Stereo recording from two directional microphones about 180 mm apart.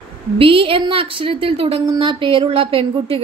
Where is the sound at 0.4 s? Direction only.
30° right (ahead or behind).